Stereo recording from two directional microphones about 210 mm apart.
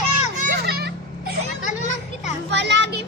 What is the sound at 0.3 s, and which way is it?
Children playing, 45° right (ahead or behind).